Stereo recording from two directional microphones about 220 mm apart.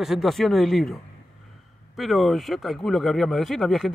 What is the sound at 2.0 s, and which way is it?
A man's voice, centre (ahead or behind).